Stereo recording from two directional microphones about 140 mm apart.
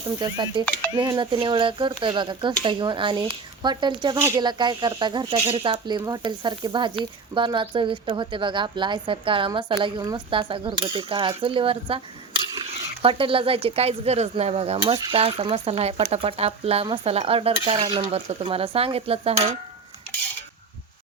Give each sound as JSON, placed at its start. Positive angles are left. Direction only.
{"t": 0.2, "sound": "speech", "side_deg": -30}